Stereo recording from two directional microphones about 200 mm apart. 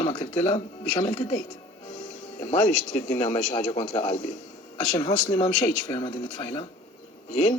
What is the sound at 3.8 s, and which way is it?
Speech, 20° left (ahead or behind).